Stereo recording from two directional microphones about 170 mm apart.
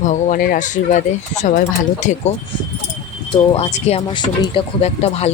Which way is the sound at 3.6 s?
40° left (ahead or behind).